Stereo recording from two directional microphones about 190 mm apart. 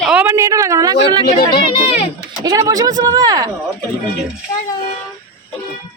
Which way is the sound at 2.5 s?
20° right (ahead or behind).